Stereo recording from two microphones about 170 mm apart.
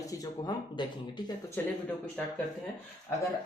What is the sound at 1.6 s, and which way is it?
Speech, 10° left (ahead or behind).